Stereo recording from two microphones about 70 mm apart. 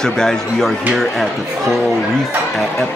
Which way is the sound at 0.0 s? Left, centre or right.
Centre.